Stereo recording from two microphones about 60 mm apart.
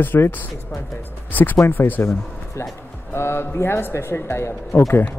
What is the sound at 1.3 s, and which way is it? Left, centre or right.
Speech, left.